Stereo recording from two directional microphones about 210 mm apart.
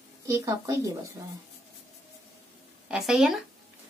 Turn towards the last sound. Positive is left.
turn(degrees=0)  # may be behind; listen again after turning